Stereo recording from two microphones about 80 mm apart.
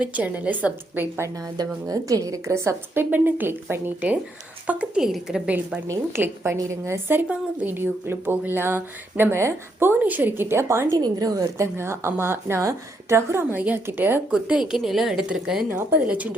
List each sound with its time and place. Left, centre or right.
0.0 s speech: centre
1.4 s a woman's voice: right; by 4.9 s centre
4.9 s a woman's voice: centre
5.9 s a woman's voice: right
10.0 s speech: right
10.9 s a woman's voice: right
14.3 s a woman's voice: centre
15.7 s a woman's voice: right